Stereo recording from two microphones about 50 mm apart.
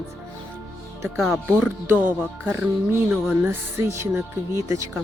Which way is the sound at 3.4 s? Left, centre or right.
Right.